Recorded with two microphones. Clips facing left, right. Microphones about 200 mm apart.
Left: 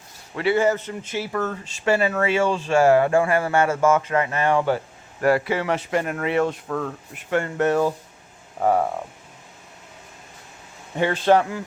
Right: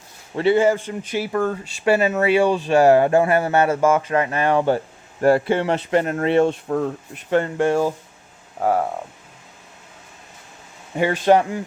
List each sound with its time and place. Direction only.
0.3 s speech: 25° right (ahead or behind)
0.6 s speech: 10° right (ahead or behind)
7.7 s speech: 10° right (ahead or behind)
10.9 s speech: 15° right (ahead or behind)